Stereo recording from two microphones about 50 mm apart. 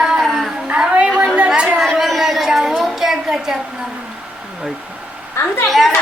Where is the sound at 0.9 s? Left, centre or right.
Right.